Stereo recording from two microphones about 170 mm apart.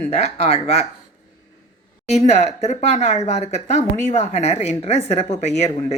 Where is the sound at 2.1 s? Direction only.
40° left (ahead or behind).